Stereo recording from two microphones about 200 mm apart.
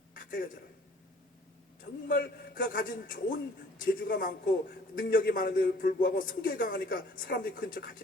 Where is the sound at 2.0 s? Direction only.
45° left (ahead or behind).